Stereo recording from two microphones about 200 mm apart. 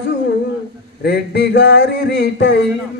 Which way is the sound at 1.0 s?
55° left (ahead or behind).